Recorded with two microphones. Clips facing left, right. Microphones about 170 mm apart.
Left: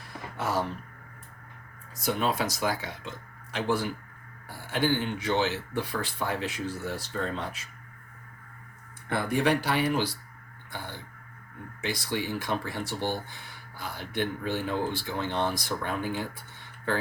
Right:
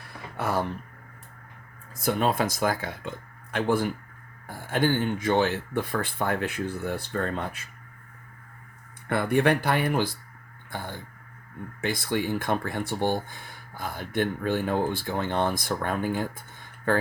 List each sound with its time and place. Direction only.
0.3 s a sound: 55° right (ahead or behind)
2.0 s speech: 50° right (ahead or behind)
9.0 s speech: 55° right (ahead or behind)